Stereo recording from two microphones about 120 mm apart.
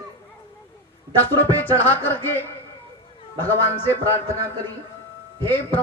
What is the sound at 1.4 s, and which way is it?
Music, 15° left (ahead or behind).